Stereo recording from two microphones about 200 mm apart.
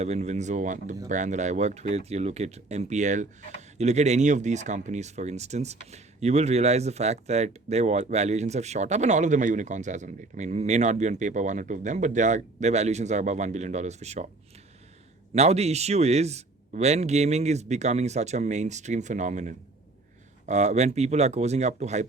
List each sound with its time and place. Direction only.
0.0 s speech: 35° right (ahead or behind)
15.4 s speech: 30° right (ahead or behind)